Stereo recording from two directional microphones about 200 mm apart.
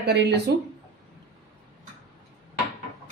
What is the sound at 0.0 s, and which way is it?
Speech, 55° right (ahead or behind).